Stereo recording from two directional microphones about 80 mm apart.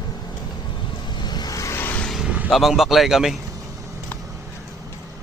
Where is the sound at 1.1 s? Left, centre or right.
Left.